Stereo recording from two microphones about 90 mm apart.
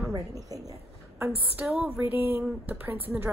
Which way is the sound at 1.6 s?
20° right (ahead or behind).